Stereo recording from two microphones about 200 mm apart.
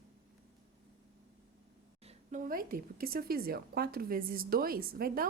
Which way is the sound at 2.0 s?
40° right (ahead or behind).